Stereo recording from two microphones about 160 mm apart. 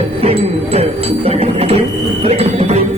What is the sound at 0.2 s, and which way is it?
Music, 40° right (ahead or behind).